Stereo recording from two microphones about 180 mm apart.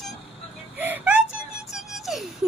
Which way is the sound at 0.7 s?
10° right (ahead or behind).